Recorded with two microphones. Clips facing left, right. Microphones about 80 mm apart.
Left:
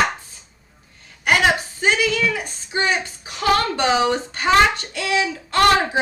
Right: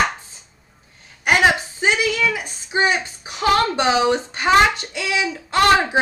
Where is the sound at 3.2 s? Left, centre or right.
Right.